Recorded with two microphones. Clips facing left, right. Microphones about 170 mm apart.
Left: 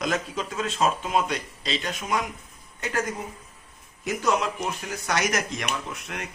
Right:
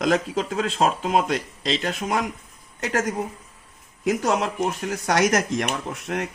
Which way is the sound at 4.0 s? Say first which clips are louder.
Right 3 dB; 55° right (ahead or behind).